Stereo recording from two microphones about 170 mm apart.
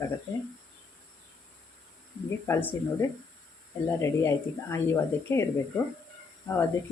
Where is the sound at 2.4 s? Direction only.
15° left (ahead or behind).